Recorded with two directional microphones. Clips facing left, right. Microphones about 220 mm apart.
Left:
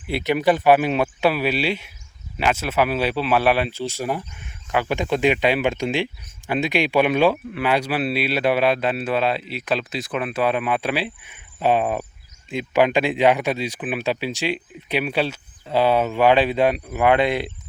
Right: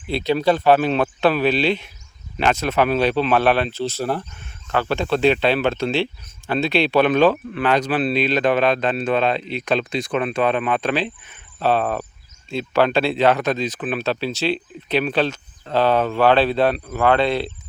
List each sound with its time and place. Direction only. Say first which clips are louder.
0.1 s speech: right 1 dB; 15° left (ahead or behind)